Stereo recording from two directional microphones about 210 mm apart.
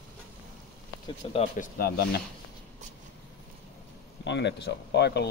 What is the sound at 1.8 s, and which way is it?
Speech, 45° left (ahead or behind).